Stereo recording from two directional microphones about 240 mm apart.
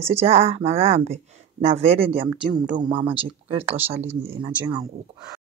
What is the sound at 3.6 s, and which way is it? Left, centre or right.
Speech, centre.